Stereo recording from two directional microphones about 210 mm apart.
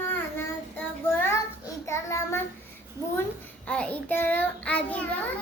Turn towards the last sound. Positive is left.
turn(degrees=5)  # may be behind; listen again after turning